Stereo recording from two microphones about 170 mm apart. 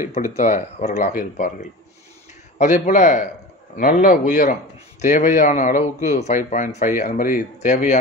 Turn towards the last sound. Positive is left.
turn(degrees=45)  # may be behind; listen again after turning